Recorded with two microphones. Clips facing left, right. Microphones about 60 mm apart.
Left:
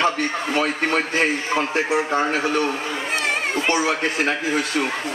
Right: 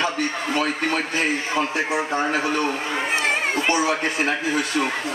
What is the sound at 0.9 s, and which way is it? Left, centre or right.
A man's voice, left.